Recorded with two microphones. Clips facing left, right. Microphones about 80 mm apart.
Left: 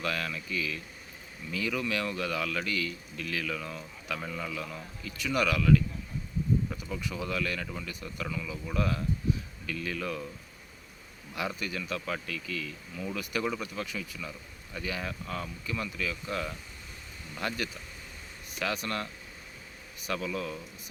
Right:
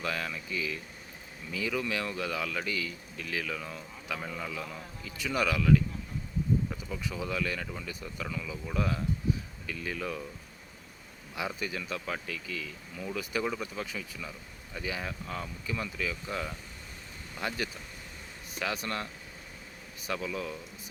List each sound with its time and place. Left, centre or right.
0.0 s speech: right
6.7 s speech: centre
7.0 s speech: right
11.3 s speech: right
14.2 s speech: centre
18.6 s speech: right
20.1 s speech: right